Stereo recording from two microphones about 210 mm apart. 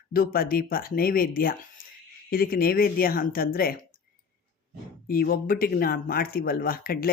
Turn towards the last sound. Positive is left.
turn(degrees=45)  # may be behind; listen again after turning